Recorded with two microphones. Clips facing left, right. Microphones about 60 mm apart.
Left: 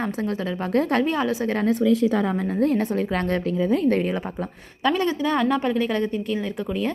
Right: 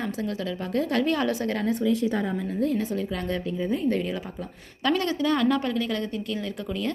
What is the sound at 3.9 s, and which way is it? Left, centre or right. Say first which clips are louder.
Speech: left 5 dB; left.